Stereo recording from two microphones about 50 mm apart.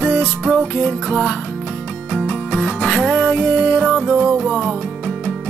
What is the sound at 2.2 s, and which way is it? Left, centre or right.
Music, left.